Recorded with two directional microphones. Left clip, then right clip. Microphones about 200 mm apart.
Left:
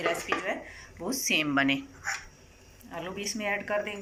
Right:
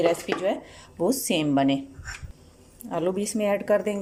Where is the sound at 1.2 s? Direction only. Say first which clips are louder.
Left 2 dB; 35° right (ahead or behind).